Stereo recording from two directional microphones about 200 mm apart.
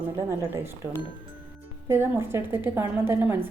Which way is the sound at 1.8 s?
10° right (ahead or behind).